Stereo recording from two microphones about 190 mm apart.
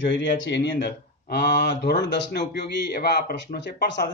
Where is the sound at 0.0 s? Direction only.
70° left (ahead or behind).